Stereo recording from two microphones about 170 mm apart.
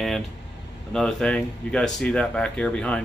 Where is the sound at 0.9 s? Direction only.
5° left (ahead or behind).